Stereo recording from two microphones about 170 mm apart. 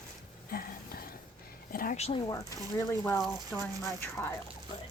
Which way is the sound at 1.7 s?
55° left (ahead or behind).